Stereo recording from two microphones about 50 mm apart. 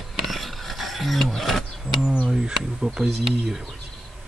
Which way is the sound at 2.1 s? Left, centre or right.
Centre.